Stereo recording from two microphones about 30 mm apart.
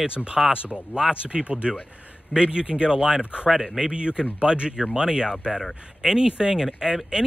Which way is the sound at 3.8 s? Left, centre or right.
Right.